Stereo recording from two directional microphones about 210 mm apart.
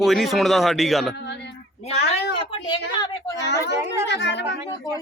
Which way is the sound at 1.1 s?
55° left (ahead or behind).